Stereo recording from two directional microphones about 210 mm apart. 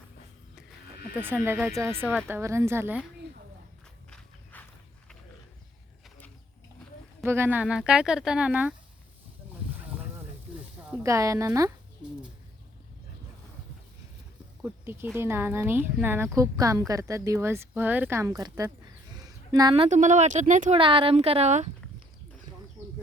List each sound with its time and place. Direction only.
1.2 s speech: 10° right (ahead or behind)
4.5 s walk: 10° left (ahead or behind)
7.3 s speech: 10° right (ahead or behind)
10.8 s a woman's voice: 10° right (ahead or behind)
14.6 s speech: 10° right (ahead or behind); by 21.7 s 30° right (ahead or behind)